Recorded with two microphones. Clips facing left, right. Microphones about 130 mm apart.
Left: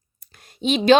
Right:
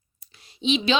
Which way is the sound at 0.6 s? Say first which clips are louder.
Left 7 dB; 50° left (ahead or behind).